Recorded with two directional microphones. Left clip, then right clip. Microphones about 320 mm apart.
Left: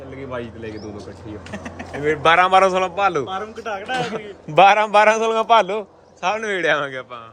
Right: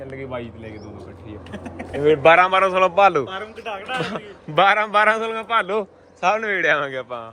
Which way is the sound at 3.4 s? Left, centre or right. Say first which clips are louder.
Left 3 dB; left.